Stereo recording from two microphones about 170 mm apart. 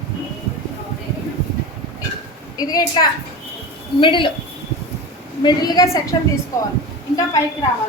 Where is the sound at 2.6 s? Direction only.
20° left (ahead or behind).